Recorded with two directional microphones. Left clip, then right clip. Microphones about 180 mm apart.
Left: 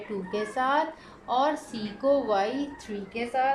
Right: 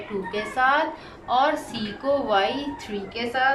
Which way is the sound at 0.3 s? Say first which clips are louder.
Right 5 dB; 30° left (ahead or behind).